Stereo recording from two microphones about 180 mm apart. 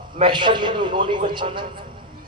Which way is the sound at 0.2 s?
25° right (ahead or behind).